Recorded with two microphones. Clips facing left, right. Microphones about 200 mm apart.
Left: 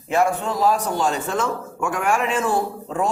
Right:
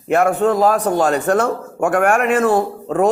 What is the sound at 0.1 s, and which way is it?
A man's voice, 60° right (ahead or behind).